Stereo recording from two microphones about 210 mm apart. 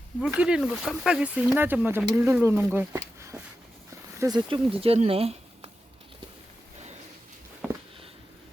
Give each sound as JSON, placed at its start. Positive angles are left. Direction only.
{"t": 0.2, "sound": "speech", "side_deg": -5}